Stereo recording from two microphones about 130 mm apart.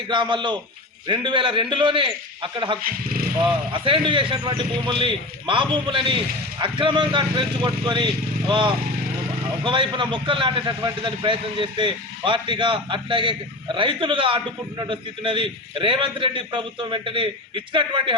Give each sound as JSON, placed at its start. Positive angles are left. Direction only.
{"t": 0.1, "sound": "a man's voice", "side_deg": -35}